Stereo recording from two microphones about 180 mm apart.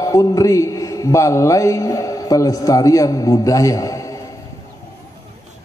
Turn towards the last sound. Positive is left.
turn(degrees=20)  # may be behind; listen again after turning